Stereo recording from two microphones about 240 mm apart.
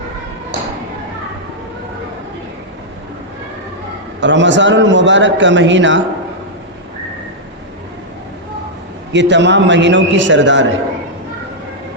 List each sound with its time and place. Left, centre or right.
4.2 s a man's voice: right
9.1 s a man's voice: right